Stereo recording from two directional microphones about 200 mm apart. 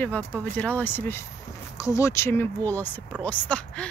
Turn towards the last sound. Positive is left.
turn(degrees=5)  # may be behind; listen again after turning